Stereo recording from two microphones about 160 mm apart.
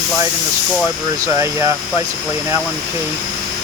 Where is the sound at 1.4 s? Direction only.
15° right (ahead or behind).